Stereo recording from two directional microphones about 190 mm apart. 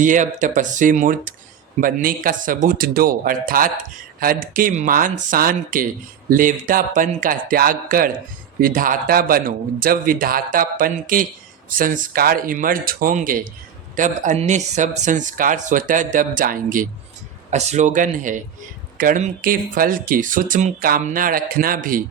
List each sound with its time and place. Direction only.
0.0 s speech: 40° right (ahead or behind)